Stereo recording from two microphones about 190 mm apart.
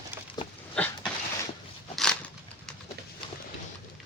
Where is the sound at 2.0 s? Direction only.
5° left (ahead or behind).